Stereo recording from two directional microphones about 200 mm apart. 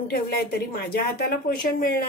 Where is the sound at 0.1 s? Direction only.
50° left (ahead or behind).